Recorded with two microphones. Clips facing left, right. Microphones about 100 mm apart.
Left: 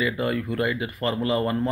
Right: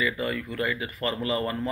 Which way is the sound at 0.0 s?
25° left (ahead or behind).